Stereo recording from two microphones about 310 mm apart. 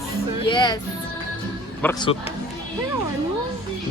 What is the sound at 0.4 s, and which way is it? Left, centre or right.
Speech, centre.